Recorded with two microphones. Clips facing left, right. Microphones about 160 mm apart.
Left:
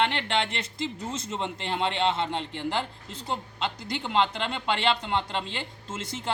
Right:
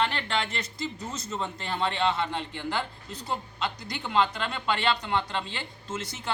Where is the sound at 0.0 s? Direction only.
25° left (ahead or behind).